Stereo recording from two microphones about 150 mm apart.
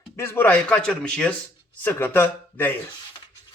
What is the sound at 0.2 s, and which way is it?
A man's voice, 15° left (ahead or behind).